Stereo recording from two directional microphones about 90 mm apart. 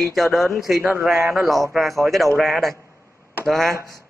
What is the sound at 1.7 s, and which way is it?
Speech, centre (ahead or behind).